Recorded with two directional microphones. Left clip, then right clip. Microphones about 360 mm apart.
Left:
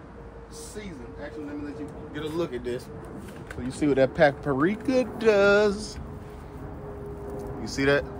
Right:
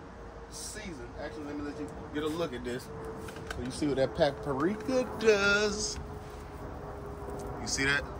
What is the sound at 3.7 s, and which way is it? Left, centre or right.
Speech, centre.